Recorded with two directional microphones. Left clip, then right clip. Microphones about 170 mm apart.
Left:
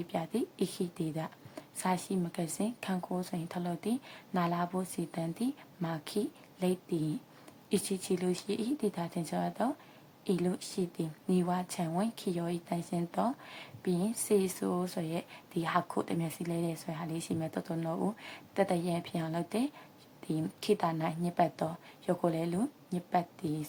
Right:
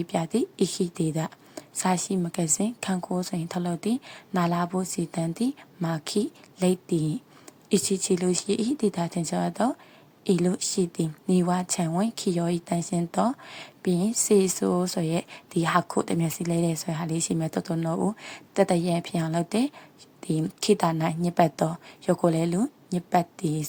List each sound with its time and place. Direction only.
0.0 s speech: 35° right (ahead or behind)